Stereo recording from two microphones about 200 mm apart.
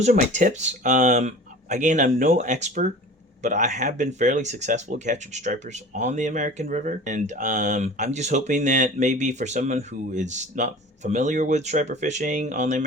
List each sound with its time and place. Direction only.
0.0 s speech: 35° right (ahead or behind)